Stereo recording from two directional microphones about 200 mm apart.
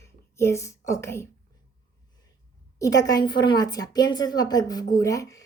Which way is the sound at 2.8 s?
20° left (ahead or behind).